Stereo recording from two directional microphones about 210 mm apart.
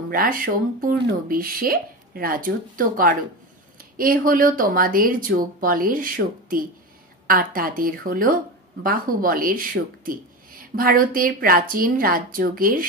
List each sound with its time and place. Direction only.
0.1 s speech: 40° right (ahead or behind)